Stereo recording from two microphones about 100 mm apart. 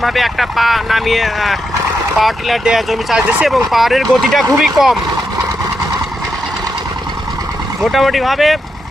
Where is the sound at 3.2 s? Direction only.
15° right (ahead or behind).